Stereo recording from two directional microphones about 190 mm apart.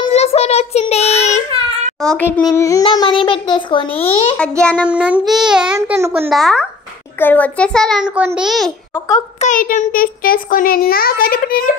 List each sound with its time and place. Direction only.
0.0 s child singing: 30° left (ahead or behind)
2.0 s a child's voice: 10° left (ahead or behind); by 4.4 s 30° left (ahead or behind)
4.4 s child singing: 5° left (ahead or behind)
4.8 s child singing: 5° right (ahead or behind)
5.8 s a child's voice: 15° right (ahead or behind)
6.3 s child singing: centre (ahead or behind)
7.2 s a child's voice: 10° left (ahead or behind)
8.2 s child singing: 5° right (ahead or behind)
9.4 s a child's voice: 45° left (ahead or behind)